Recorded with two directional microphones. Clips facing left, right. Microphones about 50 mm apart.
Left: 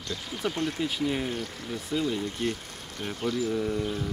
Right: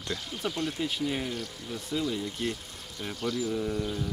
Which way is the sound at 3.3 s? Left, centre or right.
Centre.